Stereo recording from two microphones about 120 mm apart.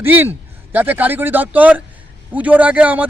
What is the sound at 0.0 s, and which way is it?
A man's voice, 15° right (ahead or behind).